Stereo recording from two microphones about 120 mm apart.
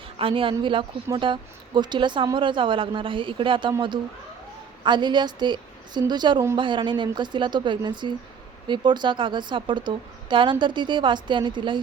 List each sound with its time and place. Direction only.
0.2 s a woman's voice: 50° right (ahead or behind)